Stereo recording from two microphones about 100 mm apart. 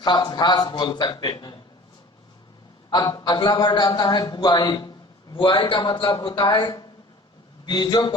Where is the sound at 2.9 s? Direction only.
45° left (ahead or behind).